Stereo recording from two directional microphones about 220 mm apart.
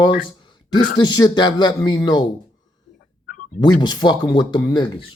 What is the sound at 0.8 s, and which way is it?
Speech, 20° left (ahead or behind).